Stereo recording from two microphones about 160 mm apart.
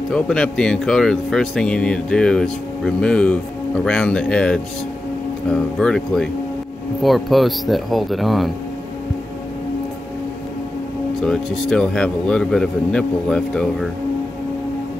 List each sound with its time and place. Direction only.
0.1 s speech: 5° left (ahead or behind)
11.1 s speech: centre (ahead or behind)